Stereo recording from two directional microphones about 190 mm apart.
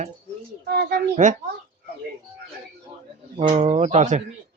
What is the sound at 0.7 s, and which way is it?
Speech, 55° right (ahead or behind).